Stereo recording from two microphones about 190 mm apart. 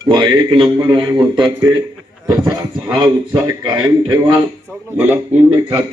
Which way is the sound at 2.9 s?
25° right (ahead or behind).